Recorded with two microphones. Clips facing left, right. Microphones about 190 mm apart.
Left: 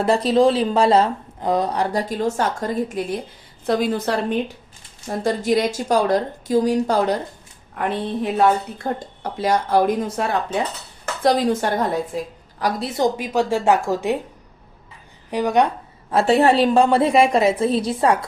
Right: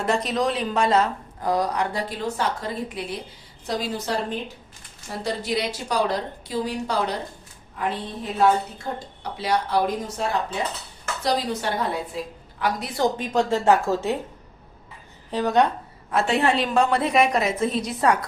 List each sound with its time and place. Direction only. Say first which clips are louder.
0.0 s a woman's voice: left 7 dB; 30° left (ahead or behind)
3.7 s a woman's voice: left 7 dB; 55° left (ahead or behind)
7.8 s a woman's voice: left 6 dB; 65° left (ahead or behind)
8.8 s a woman's voice: left 6 dB; 45° left (ahead or behind)
13.0 s a woman's voice: left 2 dB; 10° left (ahead or behind)
15.3 s a woman's voice: left 2 dB; 15° left (ahead or behind)
16.0 s a woman's voice: left 6 dB; 35° left (ahead or behind)